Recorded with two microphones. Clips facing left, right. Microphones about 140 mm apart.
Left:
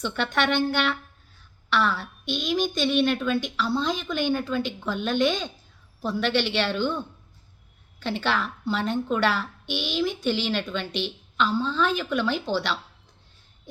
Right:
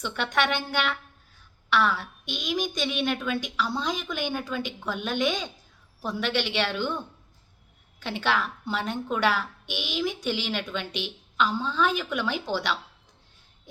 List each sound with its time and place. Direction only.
0.0 s a woman's voice: 10° right (ahead or behind)